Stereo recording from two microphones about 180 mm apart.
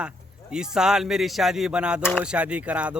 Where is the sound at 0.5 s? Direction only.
5° right (ahead or behind).